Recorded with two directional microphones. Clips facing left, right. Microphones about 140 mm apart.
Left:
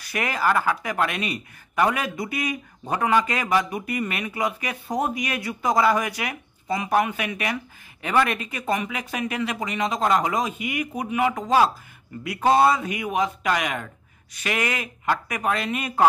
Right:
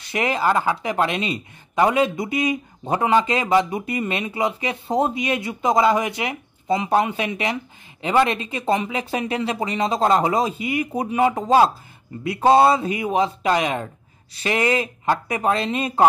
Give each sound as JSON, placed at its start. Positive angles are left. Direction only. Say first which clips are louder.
{"t": 0.0, "sound": "speech", "louder": "right 3 dB", "side_deg": -25}